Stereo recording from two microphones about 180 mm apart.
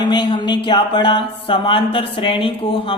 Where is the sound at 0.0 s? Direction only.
25° left (ahead or behind).